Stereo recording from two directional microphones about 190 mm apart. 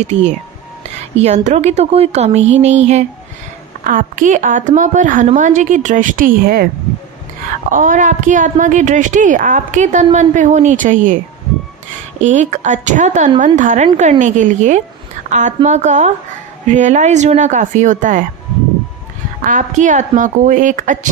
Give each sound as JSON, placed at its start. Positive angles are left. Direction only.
{"t": 0.0, "sound": "a woman's voice", "side_deg": -40}
{"t": 7.7, "sound": "a woman's voice", "side_deg": -40}
{"t": 12.2, "sound": "a woman's voice", "side_deg": -40}
{"t": 19.4, "sound": "speech", "side_deg": -40}